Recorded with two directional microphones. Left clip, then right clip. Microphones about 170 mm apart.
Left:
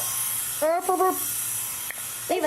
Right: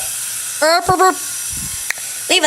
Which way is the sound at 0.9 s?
50° right (ahead or behind).